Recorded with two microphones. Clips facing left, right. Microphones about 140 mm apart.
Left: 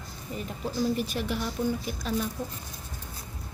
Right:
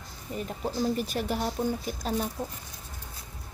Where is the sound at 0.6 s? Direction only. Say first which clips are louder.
Left 1 dB; 45° right (ahead or behind).